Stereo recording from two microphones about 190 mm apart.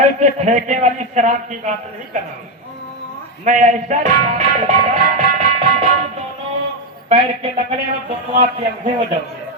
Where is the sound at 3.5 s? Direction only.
40° right (ahead or behind).